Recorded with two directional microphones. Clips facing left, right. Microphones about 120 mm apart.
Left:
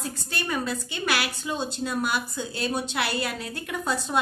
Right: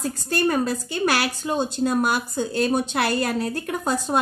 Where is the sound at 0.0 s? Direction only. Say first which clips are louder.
Right 10 dB; 45° right (ahead or behind).